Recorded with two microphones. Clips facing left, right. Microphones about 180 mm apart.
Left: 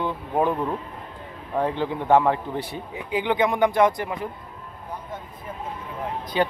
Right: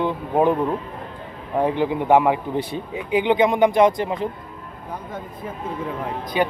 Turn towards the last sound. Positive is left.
turn(degrees=-15)  # may be behind; listen again after turning